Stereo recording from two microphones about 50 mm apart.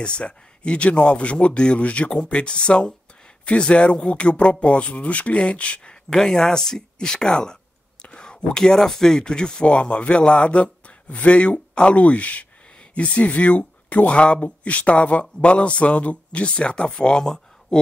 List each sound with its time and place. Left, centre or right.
0.0 s speech: left
6.1 s speech: centre
17.2 s a sound: centre